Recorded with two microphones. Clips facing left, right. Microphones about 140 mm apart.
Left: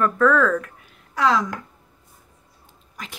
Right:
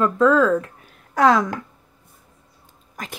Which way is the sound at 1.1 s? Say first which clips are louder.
Right 4 dB; 50° right (ahead or behind).